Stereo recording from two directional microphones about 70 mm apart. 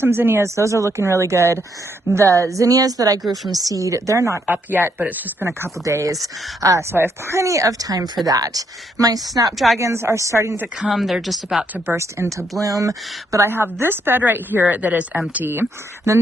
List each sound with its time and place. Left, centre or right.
0.0 s speech: right
4.4 s a woman's voice: right
5.5 s speech: right
5.8 s speech: right
6.9 s speech: right
8.3 s a woman's voice: right
9.7 s speech: right
10.8 s speech: centre
11.6 s speech: centre
11.9 s speech: right
12.6 s speech: right
13.4 s a woman's voice: right
16.1 s speech: right